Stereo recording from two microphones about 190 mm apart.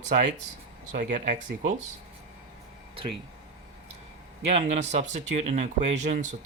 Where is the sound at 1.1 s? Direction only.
40° right (ahead or behind).